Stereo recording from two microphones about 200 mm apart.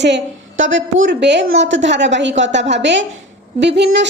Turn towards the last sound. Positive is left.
turn(degrees=-60)  # may be behind; listen again after turning